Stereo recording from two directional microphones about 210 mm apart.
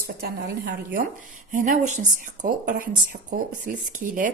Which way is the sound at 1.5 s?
35° right (ahead or behind).